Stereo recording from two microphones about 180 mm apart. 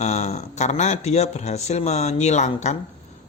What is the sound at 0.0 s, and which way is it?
A man's voice, 40° left (ahead or behind).